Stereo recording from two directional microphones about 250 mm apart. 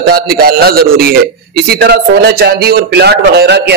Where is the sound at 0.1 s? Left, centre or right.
Right.